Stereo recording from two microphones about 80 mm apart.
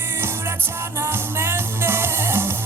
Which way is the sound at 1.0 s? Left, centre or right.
Right.